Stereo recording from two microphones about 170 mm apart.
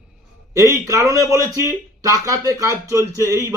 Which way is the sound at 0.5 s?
20° right (ahead or behind).